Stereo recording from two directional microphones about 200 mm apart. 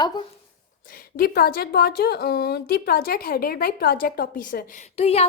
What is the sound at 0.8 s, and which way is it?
A woman's voice, 45° left (ahead or behind).